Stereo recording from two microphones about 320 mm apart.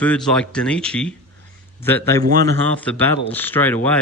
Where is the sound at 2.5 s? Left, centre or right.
Centre.